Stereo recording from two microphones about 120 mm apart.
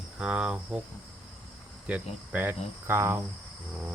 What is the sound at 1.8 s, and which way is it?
Cricket, 15° right (ahead or behind).